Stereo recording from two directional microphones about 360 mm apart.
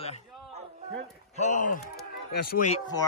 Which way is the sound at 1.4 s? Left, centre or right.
Centre.